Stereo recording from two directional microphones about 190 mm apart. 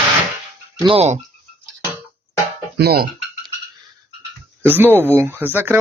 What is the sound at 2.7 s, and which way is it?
Speech, 55° right (ahead or behind).